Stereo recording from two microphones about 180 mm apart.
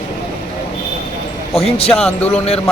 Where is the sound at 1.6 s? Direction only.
35° left (ahead or behind).